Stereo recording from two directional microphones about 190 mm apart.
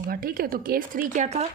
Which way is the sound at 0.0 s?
50° right (ahead or behind).